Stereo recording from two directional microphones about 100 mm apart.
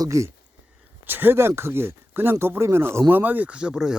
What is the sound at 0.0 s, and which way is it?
Speech, 30° right (ahead or behind).